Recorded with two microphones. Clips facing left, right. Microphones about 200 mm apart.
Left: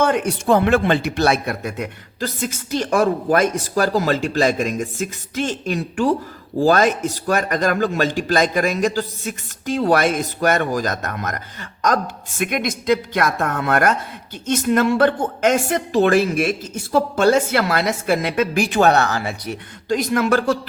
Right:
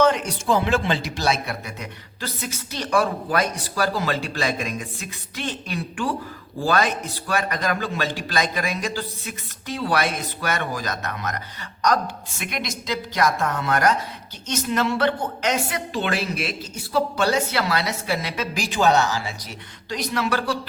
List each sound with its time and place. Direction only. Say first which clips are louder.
0.0 s a woman's voice: left 1 dB; 55° left (ahead or behind)